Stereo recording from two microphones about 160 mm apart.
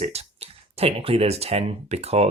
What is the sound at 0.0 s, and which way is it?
Speech, 40° right (ahead or behind).